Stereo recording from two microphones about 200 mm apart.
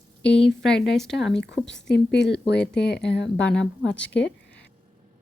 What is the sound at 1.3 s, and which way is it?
Speech, 60° left (ahead or behind).